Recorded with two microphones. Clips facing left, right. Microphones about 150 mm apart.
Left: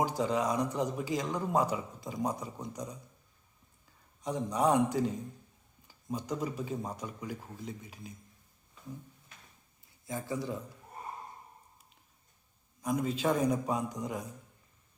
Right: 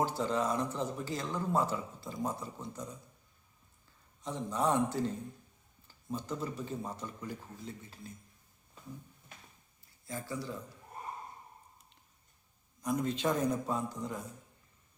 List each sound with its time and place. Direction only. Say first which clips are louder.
0.0 s a man's voice: left 2 dB; 10° left (ahead or behind)
4.2 s a man's voice: left 3 dB; 10° left (ahead or behind)
10.1 s speech: left 4 dB; 20° left (ahead or behind)
12.8 s a man's voice: left 1 dB; 5° left (ahead or behind)